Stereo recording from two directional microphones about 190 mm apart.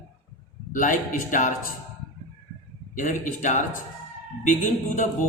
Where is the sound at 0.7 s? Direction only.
45° left (ahead or behind).